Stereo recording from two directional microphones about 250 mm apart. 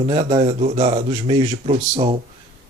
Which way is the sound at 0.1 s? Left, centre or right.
Right.